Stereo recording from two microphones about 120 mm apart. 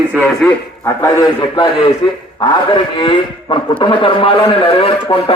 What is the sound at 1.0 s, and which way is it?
A man's voice, 35° left (ahead or behind).